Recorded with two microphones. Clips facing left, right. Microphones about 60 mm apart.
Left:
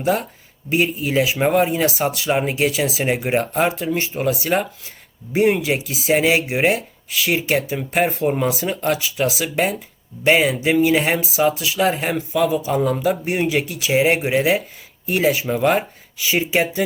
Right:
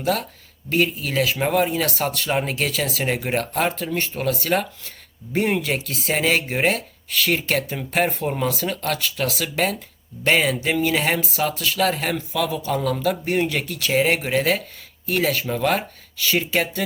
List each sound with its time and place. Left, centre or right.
0.0 s speech: centre